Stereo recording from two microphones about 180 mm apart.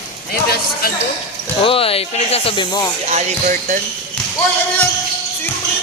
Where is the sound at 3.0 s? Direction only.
40° right (ahead or behind).